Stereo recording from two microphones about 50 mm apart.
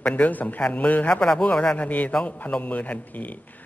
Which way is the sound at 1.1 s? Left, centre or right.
Centre.